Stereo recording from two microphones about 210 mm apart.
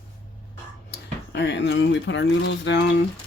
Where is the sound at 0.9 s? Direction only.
55° left (ahead or behind).